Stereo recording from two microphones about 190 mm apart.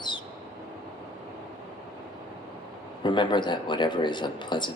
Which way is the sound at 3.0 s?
25° left (ahead or behind).